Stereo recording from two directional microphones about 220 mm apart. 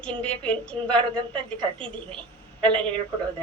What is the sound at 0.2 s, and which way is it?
Speech, 5° left (ahead or behind).